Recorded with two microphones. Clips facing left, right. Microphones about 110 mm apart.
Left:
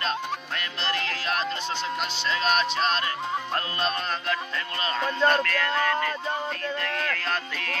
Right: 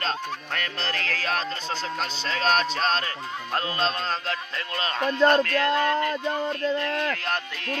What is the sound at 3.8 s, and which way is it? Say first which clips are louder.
Speech: right 2 dB; 25° right (ahead or behind).